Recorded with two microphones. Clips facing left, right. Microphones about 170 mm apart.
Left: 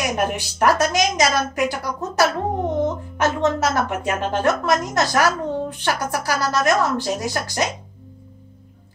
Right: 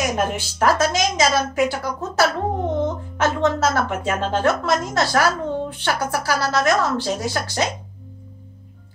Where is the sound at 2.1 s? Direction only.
15° left (ahead or behind).